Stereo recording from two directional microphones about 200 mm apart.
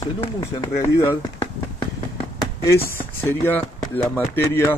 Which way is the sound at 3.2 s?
10° left (ahead or behind).